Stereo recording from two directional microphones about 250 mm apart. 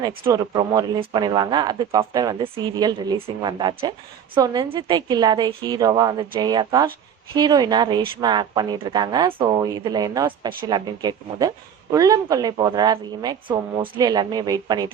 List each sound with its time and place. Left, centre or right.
0.3 s speech: centre